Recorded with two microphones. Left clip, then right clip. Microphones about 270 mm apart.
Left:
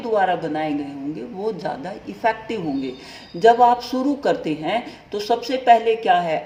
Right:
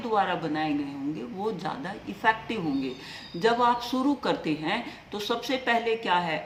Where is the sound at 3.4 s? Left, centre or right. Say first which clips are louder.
Left 9 dB; centre.